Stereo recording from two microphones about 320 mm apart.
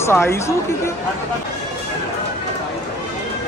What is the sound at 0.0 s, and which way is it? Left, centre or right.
Speech, centre.